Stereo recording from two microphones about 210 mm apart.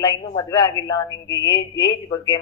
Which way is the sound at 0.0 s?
20° left (ahead or behind).